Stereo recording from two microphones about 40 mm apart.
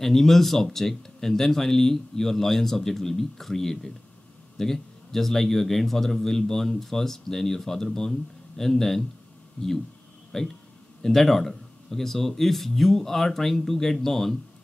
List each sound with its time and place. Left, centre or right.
0.0 s a man's voice: centre
9.6 s speech: left
10.3 s a man's voice: centre